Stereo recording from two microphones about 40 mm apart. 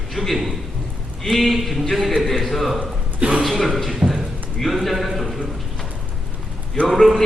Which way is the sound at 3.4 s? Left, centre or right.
Centre.